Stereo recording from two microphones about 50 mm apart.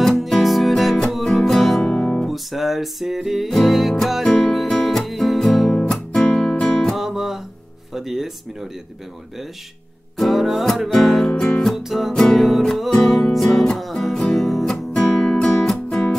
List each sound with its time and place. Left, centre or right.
0.0 s music: centre
1.8 s guitar: centre
2.2 s music: centre
5.8 s music: centre
7.0 s music: centre
7.9 s speech: centre
10.1 s music: centre
11.7 s music: centre
12.1 s music: centre
15.2 s music: centre